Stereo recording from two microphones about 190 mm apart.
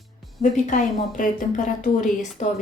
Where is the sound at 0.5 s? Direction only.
40° left (ahead or behind).